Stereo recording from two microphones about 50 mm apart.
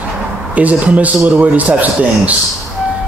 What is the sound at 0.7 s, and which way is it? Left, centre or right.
A man's voice, right.